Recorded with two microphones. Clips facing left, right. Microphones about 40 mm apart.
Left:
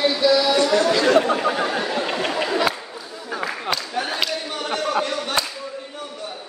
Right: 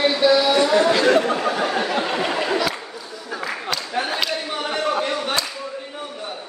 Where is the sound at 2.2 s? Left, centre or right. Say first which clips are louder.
Even; centre.